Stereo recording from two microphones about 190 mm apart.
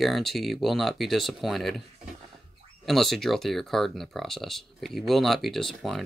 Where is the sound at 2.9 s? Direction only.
Centre (ahead or behind).